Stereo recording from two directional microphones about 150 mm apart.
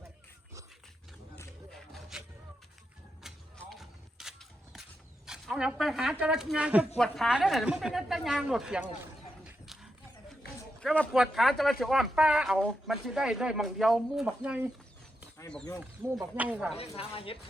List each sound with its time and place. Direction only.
1.7 s a sound: centre (ahead or behind)
3.2 s a sound: centre (ahead or behind)
3.6 s mechanisms: centre (ahead or behind)
6.9 s speech: centre (ahead or behind)
9.4 s dog: 5° right (ahead or behind)
10.8 s a man's voice: 5° left (ahead or behind); by 14.7 s 10° right (ahead or behind)
16.3 s speech: 10° right (ahead or behind)
16.7 s speech: 40° left (ahead or behind)